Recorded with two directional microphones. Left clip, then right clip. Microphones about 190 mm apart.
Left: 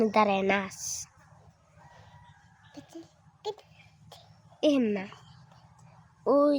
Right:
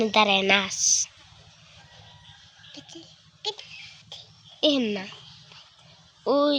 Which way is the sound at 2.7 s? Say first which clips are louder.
Right 2 dB; 30° left (ahead or behind).